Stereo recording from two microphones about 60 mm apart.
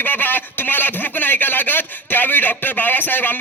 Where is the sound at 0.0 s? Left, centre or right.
Left.